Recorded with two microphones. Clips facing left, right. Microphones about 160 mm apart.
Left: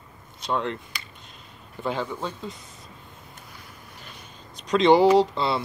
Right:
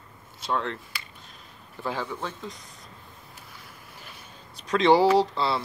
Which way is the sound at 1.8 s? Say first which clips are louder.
Left 3 dB; centre (ahead or behind).